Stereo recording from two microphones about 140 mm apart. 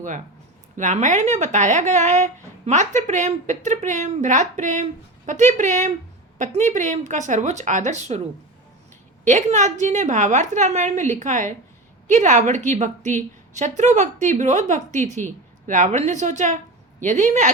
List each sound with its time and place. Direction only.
0.8 s speech: 60° right (ahead or behind)
9.2 s speech: 60° right (ahead or behind)